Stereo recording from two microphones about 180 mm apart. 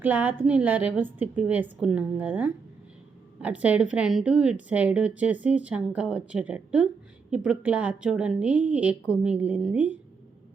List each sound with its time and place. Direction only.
0.0 s a woman's voice: 10° right (ahead or behind)